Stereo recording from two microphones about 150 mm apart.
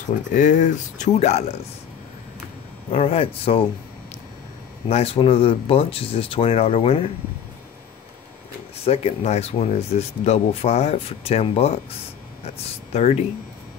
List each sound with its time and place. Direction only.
0.3 s speech: 60° left (ahead or behind)
2.9 s speech: 40° left (ahead or behind)
4.8 s speech: 40° left (ahead or behind)
8.8 s speech: 45° left (ahead or behind)
12.9 s speech: 50° left (ahead or behind)